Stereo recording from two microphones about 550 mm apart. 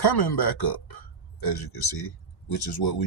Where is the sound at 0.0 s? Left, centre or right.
Left.